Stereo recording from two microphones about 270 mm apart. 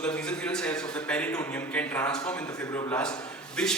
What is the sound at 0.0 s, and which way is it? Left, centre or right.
A man's voice, centre.